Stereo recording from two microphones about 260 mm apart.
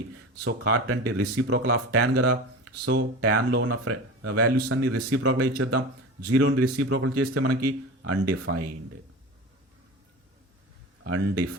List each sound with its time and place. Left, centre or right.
0.6 s speech: right
11.0 s speech: right